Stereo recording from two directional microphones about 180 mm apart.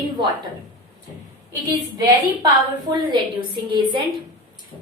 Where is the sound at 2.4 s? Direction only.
25° right (ahead or behind).